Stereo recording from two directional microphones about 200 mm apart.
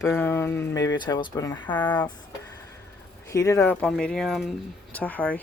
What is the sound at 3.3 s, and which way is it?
Speech, 15° left (ahead or behind).